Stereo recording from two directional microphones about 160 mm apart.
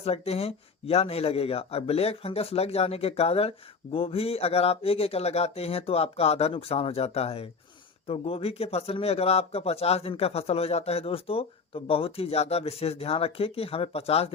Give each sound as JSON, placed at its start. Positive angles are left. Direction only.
{"t": 0.0, "sound": "a man's voice", "side_deg": 40}